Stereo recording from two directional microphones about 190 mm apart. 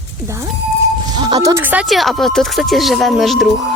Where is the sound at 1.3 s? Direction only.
20° right (ahead or behind).